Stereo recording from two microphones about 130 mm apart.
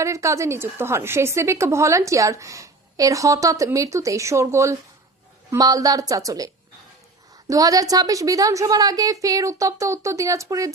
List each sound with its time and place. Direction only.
0.0 s a woman's voice: 25° right (ahead or behind)